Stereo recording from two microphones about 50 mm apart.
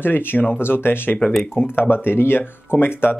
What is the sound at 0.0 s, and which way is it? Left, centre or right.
Speech, left.